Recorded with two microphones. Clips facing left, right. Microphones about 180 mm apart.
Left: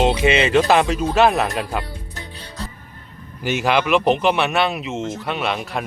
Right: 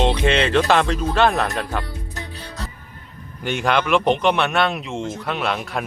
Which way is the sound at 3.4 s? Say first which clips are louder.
Left 1 dB; 5° left (ahead or behind).